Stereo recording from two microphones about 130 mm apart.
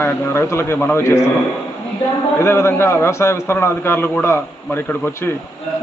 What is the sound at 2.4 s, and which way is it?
A man's voice, 20° left (ahead or behind).